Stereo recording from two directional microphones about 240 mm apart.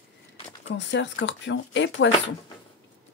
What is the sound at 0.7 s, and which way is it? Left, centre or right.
A woman's voice, left.